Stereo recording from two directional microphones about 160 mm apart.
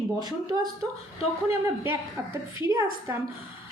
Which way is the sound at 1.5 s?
15° right (ahead or behind).